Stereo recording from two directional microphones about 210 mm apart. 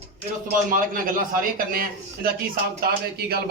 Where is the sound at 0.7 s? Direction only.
40° right (ahead or behind).